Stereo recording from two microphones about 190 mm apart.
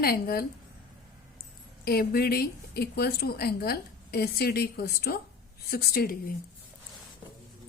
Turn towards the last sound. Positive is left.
turn(degrees=50)  # may be behind; listen again after turning